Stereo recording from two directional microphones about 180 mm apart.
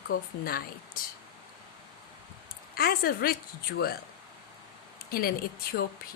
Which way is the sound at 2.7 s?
55° left (ahead or behind).